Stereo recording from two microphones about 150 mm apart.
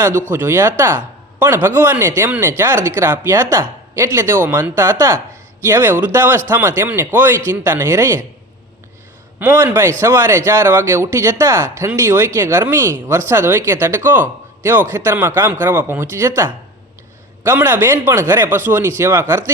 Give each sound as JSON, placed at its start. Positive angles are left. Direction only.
{"t": 0.3, "sound": "speech", "side_deg": -15}
{"t": 9.4, "sound": "speech", "side_deg": -15}